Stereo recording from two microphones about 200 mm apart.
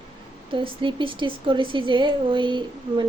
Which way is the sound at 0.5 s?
25° right (ahead or behind).